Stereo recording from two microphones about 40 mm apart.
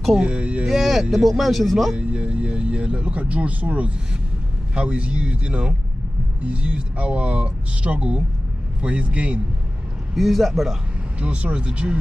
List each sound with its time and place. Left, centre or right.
0.2 s a man's voice: right
0.7 s speech: centre
2.0 s a man's voice: right
10.1 s speech: centre
11.1 s a man's voice: right